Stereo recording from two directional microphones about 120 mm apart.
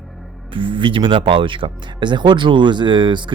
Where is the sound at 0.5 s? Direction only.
45° right (ahead or behind).